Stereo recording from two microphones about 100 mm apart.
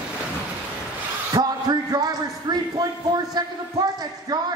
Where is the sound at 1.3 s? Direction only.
45° right (ahead or behind).